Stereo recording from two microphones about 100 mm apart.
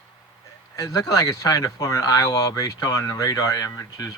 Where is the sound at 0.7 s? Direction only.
35° left (ahead or behind).